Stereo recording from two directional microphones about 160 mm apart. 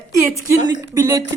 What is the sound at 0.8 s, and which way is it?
Speech, 20° right (ahead or behind).